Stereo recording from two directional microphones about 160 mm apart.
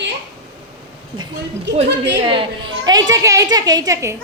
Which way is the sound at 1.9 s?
90° right.